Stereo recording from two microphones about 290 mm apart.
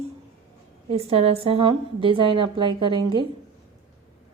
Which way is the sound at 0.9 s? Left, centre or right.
Centre.